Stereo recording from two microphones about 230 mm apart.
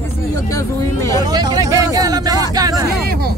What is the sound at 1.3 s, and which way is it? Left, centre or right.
Speech, centre.